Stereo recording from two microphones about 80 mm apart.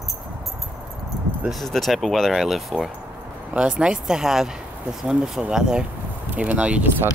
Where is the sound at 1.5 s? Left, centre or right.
Centre.